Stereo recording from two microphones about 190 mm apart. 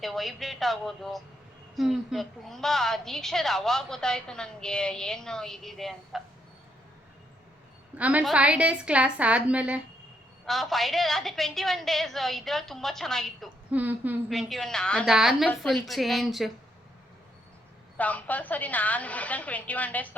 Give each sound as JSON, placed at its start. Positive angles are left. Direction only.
{"t": 0.0, "sound": "a woman's voice", "side_deg": 0}
{"t": 7.9, "sound": "a woman's voice", "side_deg": -5}
{"t": 17.9, "sound": "a woman's voice", "side_deg": 10}